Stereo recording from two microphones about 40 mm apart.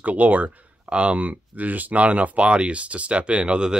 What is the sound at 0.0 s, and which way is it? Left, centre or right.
Speech, right.